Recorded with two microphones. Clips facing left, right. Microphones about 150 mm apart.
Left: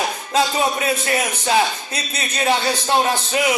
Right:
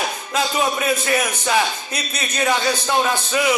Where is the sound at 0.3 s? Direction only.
30° left (ahead or behind).